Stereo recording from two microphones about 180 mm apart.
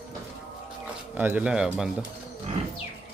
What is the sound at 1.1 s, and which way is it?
Speech, 10° right (ahead or behind).